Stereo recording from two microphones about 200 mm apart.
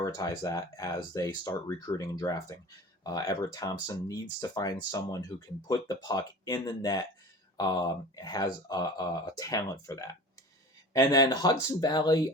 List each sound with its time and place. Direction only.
0.0 s speech: 15° left (ahead or behind)